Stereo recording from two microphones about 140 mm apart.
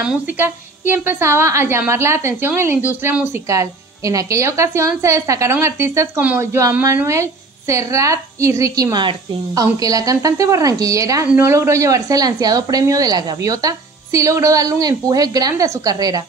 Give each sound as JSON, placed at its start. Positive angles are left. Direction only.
{"t": 0.0, "sound": "a woman's voice", "side_deg": -15}